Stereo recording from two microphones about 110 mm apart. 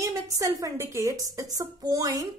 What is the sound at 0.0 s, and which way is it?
A woman's voice, 30° right (ahead or behind).